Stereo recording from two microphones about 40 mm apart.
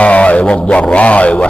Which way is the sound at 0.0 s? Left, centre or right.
Left.